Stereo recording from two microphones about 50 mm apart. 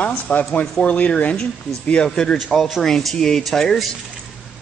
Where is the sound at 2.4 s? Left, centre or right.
Centre.